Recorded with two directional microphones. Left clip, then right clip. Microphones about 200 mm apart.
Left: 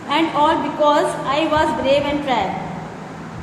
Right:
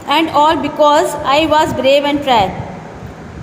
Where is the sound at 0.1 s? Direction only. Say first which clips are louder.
Right 5 dB; 45° right (ahead or behind).